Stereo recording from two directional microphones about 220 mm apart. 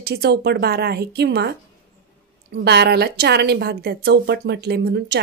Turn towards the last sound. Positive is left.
turn(degrees=-50)  # may be behind; listen again after turning